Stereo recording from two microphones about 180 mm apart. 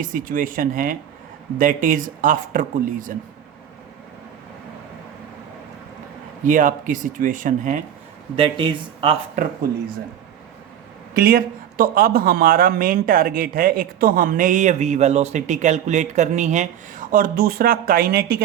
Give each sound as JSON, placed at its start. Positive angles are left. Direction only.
{"t": 0.0, "sound": "a man's voice", "side_deg": -50}
{"t": 6.4, "sound": "a man's voice", "side_deg": -45}
{"t": 8.4, "sound": "speech", "side_deg": -30}
{"t": 9.3, "sound": "a man's voice", "side_deg": -50}
{"t": 11.1, "sound": "a man's voice", "side_deg": -55}